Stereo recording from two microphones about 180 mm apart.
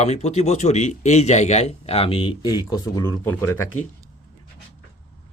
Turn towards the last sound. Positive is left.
turn(degrees=15)  # may be behind; listen again after turning